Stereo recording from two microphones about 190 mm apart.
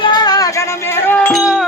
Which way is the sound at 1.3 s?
Centre (ahead or behind).